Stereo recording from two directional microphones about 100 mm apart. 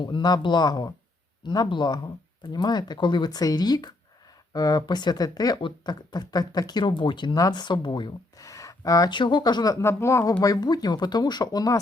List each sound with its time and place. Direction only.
0.0 s speech: 50° left (ahead or behind)
5.5 s speech: 50° left (ahead or behind)
8.4 s a sound: 35° left (ahead or behind)
9.0 s speech: 50° left (ahead or behind)
9.8 s speech: 25° left (ahead or behind)
10.4 s speech: 40° left (ahead or behind)